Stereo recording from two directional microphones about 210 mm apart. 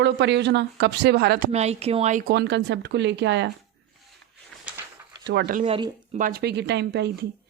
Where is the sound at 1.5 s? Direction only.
30° right (ahead or behind).